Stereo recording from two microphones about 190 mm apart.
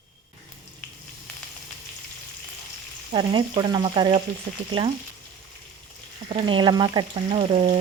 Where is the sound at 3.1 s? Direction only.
30° right (ahead or behind).